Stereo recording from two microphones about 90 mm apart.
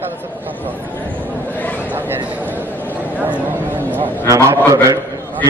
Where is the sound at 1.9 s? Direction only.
20° right (ahead or behind).